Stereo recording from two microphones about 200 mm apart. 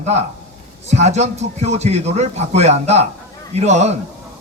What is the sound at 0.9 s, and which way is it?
Speech, 35° right (ahead or behind).